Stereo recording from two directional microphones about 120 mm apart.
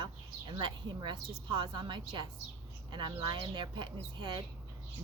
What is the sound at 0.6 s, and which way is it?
Speech, 40° right (ahead or behind).